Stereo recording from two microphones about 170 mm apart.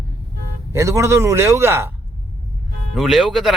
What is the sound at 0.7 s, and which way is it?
A man's voice, 15° right (ahead or behind).